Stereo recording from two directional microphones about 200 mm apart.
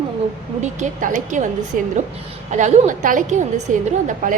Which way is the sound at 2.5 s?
35° right (ahead or behind).